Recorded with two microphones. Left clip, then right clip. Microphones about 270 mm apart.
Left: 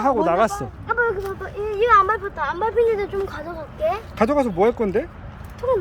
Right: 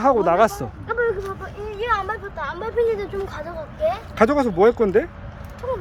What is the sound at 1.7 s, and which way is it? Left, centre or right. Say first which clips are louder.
Speech: left 8 dB; centre.